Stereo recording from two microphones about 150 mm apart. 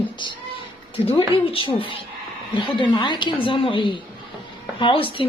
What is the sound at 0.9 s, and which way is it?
A woman's voice, 35° left (ahead or behind).